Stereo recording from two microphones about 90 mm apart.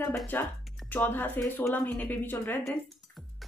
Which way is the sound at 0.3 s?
20° left (ahead or behind).